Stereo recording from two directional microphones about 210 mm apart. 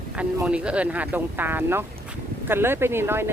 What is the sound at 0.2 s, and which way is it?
Speech, 5° right (ahead or behind).